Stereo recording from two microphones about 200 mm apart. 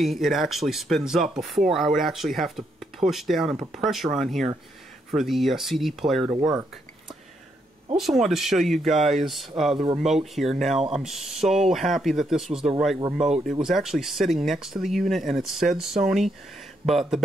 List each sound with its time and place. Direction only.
0.0 s speech: centre (ahead or behind)
7.9 s speech: centre (ahead or behind)